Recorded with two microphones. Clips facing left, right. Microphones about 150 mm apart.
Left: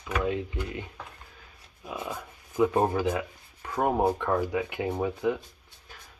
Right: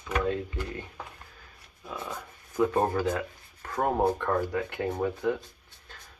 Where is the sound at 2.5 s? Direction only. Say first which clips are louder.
Left 1 dB; 10° left (ahead or behind).